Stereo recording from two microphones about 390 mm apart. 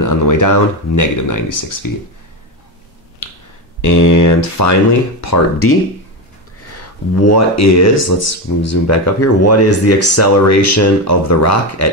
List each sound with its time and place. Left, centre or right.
0.0 s speech: left
3.8 s speech: left
7.2 s speech: left